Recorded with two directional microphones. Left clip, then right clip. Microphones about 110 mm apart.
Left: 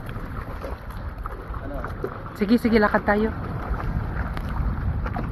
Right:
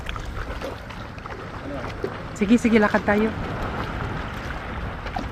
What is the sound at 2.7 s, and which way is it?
Speech, 20° right (ahead or behind).